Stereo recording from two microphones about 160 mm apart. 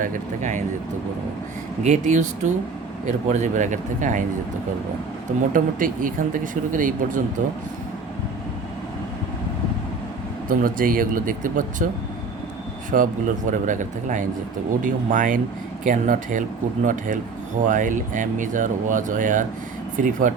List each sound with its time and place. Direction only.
0.0 s speech: 55° right (ahead or behind)
1.8 s speech: 50° right (ahead or behind)
5.5 s speech: 55° right (ahead or behind)
10.5 s speech: 60° right (ahead or behind)
12.9 s speech: 55° right (ahead or behind)